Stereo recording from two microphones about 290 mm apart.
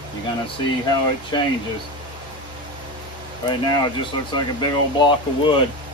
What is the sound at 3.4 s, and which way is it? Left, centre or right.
Speech, centre.